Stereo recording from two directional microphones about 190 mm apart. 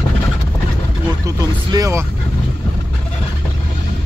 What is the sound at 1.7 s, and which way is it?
Speech, 15° right (ahead or behind).